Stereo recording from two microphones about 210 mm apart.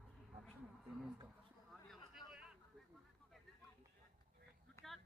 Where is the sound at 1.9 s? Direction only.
Centre (ahead or behind).